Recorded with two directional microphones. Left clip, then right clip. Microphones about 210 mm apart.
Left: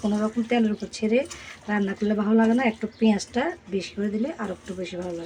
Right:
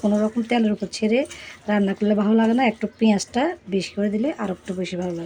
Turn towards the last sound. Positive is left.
turn(degrees=-35)  # may be behind; listen again after turning